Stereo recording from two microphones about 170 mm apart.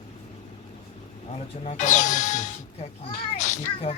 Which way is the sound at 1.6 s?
45° left (ahead or behind).